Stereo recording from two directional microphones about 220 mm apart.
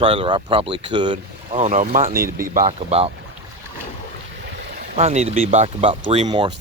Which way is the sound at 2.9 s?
25° right (ahead or behind).